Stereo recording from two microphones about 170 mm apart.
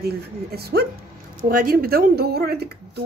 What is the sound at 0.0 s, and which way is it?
Speech, 65° right (ahead or behind).